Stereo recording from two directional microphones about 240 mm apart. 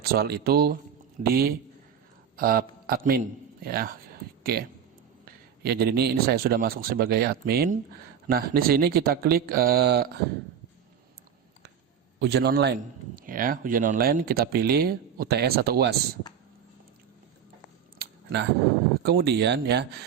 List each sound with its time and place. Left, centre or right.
0.0 s a man's voice: right
12.2 s a man's voice: right
18.0 s a sound: right
19.0 s speech: right